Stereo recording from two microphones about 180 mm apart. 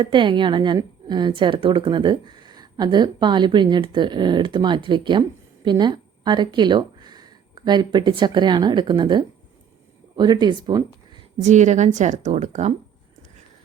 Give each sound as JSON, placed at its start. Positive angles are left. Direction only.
{"t": 0.0, "sound": "a woman's voice", "side_deg": -25}
{"t": 11.3, "sound": "a woman's voice", "side_deg": -40}